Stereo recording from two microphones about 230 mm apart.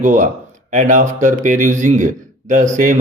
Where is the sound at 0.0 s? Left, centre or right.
Right.